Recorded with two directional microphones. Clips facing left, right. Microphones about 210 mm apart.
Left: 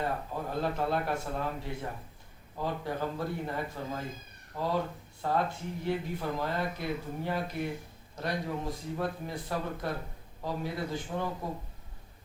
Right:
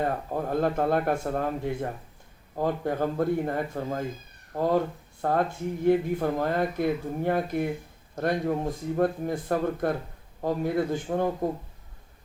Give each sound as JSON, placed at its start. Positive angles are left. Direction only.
{"t": 0.0, "sound": "speech", "side_deg": -50}